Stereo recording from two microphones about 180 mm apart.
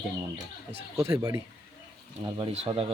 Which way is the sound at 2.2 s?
30° right (ahead or behind).